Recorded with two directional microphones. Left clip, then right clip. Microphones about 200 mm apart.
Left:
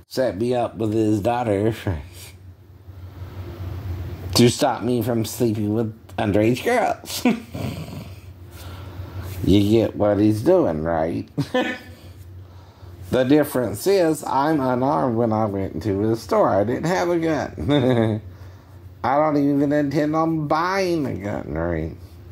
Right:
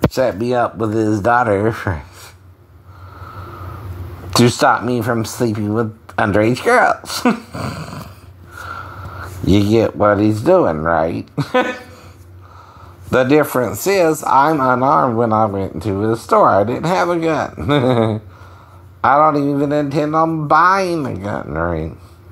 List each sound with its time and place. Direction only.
0.1 s speech: 10° right (ahead or behind)
4.3 s speech: centre (ahead or behind)
9.5 s speech: 5° right (ahead or behind)
13.1 s speech: 5° right (ahead or behind)
15.4 s speech: 20° right (ahead or behind)
16.2 s speech: 10° right (ahead or behind)
19.3 s speech: 5° right (ahead or behind)